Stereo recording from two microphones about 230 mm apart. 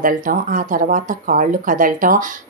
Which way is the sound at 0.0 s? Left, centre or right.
Right.